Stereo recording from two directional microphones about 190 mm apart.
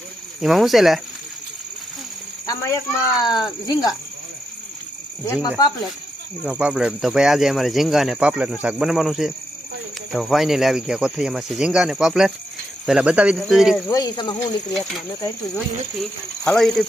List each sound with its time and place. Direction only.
0.4 s speech: centre (ahead or behind)
2.5 s speech: 20° left (ahead or behind)
5.2 s speech: 15° left (ahead or behind)
6.4 s speech: 5° right (ahead or behind)
13.8 s speech: 20° left (ahead or behind)
14.7 s speech: centre (ahead or behind)
16.4 s speech: 5° left (ahead or behind)